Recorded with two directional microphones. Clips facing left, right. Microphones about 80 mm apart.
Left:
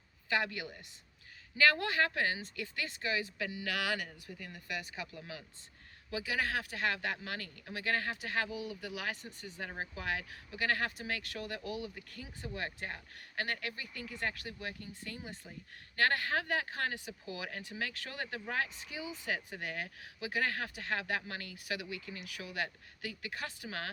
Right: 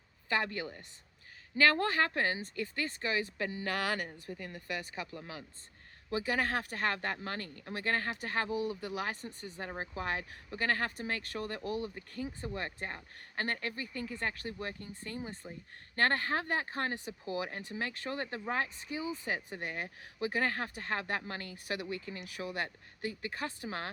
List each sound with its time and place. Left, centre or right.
0.3 s speech: right